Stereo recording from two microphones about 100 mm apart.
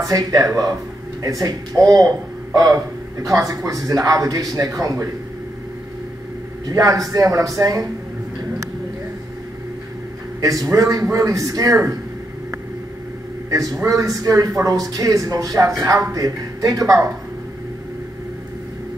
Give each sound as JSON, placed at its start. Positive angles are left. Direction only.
{"t": 0.1, "sound": "speech", "side_deg": -35}
{"t": 6.7, "sound": "speech", "side_deg": -35}
{"t": 10.4, "sound": "speech", "side_deg": -35}
{"t": 13.5, "sound": "a man's voice", "side_deg": -35}